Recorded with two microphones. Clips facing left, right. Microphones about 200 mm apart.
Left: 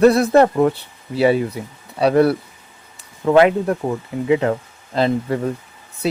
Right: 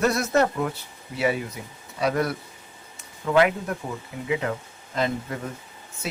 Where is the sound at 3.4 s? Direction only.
30° left (ahead or behind).